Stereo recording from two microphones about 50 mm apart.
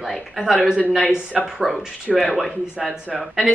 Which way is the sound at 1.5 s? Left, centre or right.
Centre.